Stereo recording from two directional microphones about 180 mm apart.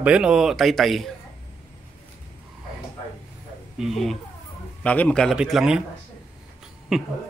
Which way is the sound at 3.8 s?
Centre (ahead or behind).